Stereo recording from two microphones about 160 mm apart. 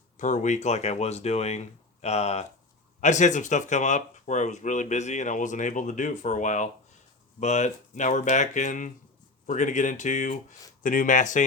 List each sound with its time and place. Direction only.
0.2 s speech: 50° left (ahead or behind)